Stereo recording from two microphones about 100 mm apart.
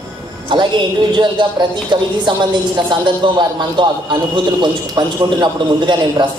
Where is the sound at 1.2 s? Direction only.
50° right (ahead or behind).